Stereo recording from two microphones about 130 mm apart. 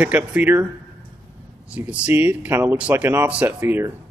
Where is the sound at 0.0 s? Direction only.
10° right (ahead or behind).